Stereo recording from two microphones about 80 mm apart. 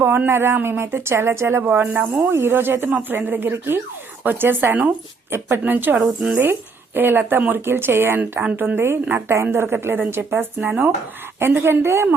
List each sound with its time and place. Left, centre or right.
0.3 s speech: right
6.0 s speech: centre
6.3 s speech: right